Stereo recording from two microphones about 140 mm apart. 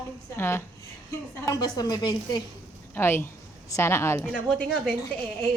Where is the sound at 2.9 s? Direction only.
15° left (ahead or behind).